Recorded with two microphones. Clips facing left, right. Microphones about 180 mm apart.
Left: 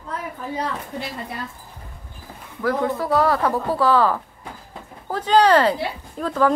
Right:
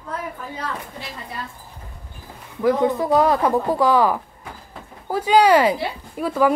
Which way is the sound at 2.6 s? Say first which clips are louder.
Right 4 dB; 20° right (ahead or behind).